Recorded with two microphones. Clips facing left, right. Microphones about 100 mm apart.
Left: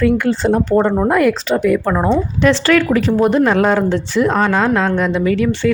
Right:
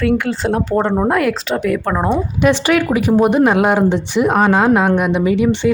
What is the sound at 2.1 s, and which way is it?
Speech, 15° right (ahead or behind).